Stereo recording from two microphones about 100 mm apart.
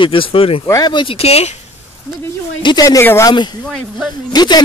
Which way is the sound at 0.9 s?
55° left (ahead or behind).